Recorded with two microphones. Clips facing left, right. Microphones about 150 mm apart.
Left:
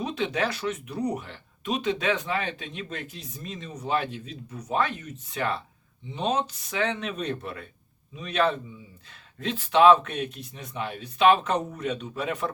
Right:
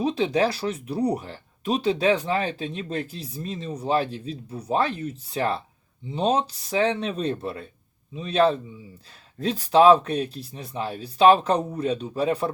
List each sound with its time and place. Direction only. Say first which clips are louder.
0.0 s speech: right 6 dB; 35° right (ahead or behind)